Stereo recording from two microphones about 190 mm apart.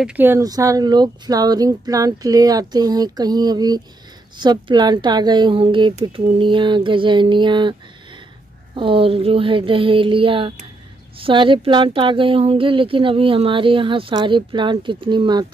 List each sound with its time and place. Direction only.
0.0 s speech: 10° right (ahead or behind); by 7.7 s 25° right (ahead or behind)
8.7 s speech: 25° right (ahead or behind)